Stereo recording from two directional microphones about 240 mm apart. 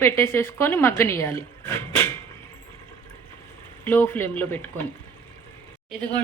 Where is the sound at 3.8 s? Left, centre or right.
Centre.